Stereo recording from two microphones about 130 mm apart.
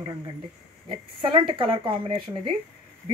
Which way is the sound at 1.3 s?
40° right (ahead or behind).